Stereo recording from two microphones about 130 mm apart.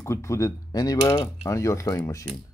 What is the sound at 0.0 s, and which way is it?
Speech, 20° left (ahead or behind).